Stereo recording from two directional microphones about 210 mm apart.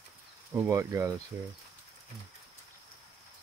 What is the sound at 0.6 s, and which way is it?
Speech, 15° right (ahead or behind).